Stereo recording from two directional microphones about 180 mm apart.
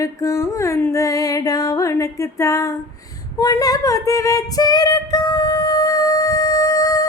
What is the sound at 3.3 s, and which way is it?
Female singing, 20° left (ahead or behind).